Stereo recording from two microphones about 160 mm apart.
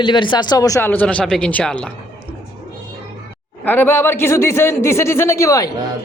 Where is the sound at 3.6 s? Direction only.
15° left (ahead or behind).